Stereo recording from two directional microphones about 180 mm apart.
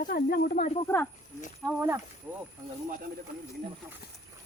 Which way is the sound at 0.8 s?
10° left (ahead or behind).